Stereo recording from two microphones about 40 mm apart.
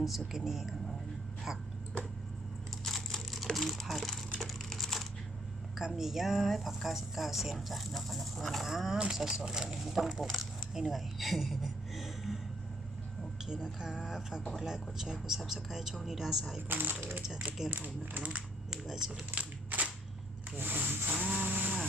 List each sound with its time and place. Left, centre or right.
0.3 s a woman's voice: centre
2.8 s crumpling: centre
3.7 s a sound: centre
5.7 s a woman's voice: centre
8.6 s a woman's voice: centre
10.8 s a sound: centre
13.4 s speech: centre
16.6 s speech: right
17.7 s speech: right
18.2 s speech: right
18.7 s speech: centre
19.4 s crushing: right
20.6 s rub: right
21.4 s chainsaw: right